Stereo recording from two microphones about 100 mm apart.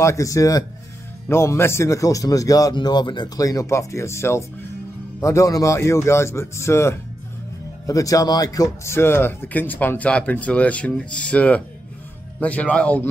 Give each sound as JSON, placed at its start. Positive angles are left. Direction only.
{"t": 0.0, "sound": "a man's voice", "side_deg": 30}